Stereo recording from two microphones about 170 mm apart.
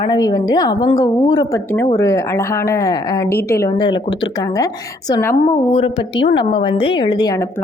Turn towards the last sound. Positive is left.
turn(degrees=20)  # may be behind; listen again after turning